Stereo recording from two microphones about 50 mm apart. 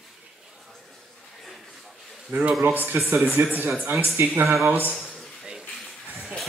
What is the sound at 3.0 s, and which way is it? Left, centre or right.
Speech, right.